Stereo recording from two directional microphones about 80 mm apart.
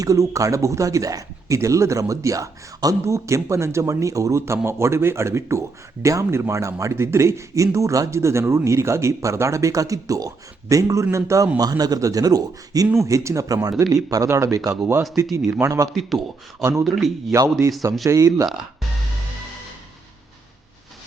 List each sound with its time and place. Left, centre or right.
0.0 s speech: right
11.5 s speech: right
14.3 s speech: right
16.8 s a man's voice: centre
17.3 s speech: right